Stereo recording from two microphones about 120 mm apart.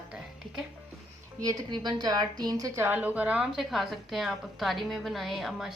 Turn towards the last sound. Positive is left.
turn(degrees=0)  # may be behind; listen again after turning